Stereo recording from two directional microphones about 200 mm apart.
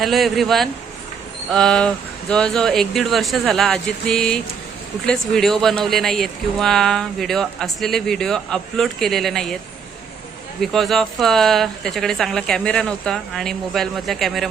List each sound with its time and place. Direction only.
0.0 s speech: centre (ahead or behind)
10.6 s speech: centre (ahead or behind)